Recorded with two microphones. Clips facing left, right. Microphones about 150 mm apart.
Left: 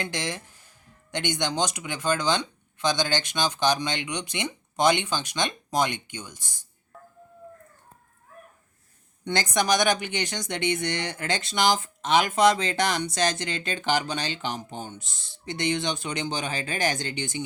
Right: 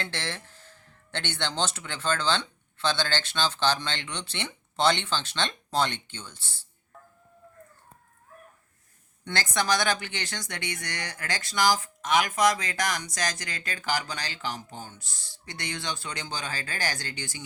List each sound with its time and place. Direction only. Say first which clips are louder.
0.0 s speech: left 4 dB; 15° left (ahead or behind)
9.2 s speech: left 3 dB; 15° left (ahead or behind)